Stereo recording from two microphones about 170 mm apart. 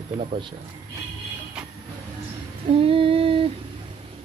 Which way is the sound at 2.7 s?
35° right (ahead or behind).